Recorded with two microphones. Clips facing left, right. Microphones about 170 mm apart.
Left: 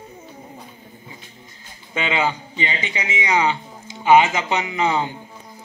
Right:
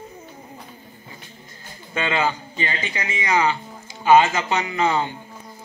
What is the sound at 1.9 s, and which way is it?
A man's voice, 15° left (ahead or behind).